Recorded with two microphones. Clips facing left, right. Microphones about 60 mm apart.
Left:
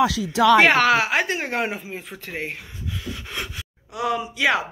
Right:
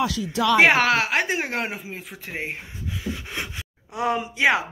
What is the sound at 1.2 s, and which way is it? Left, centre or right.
Speech, centre.